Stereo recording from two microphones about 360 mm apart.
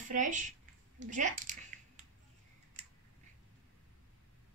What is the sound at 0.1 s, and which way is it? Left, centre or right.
Speech, right.